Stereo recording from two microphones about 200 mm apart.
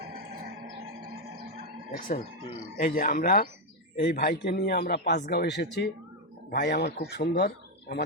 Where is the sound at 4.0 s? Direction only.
55° left (ahead or behind).